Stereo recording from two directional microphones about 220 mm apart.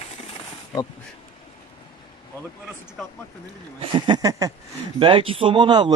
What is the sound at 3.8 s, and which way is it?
Speech, 20° right (ahead or behind).